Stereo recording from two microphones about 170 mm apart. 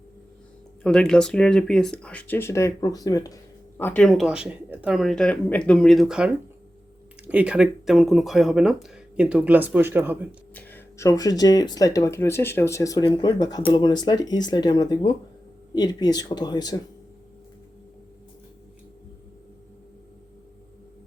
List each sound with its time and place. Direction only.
0.8 s speech: 5° left (ahead or behind); by 3.3 s 20° left (ahead or behind)
3.8 s speech: 10° left (ahead or behind); by 10.2 s 10° right (ahead or behind)
10.5 s speech: 10° left (ahead or behind)